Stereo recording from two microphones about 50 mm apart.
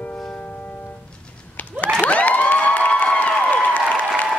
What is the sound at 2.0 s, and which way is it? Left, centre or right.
Cheering, left.